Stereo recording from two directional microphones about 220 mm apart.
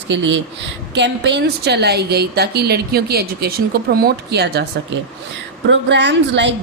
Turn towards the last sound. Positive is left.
turn(degrees=-55)  # may be behind; listen again after turning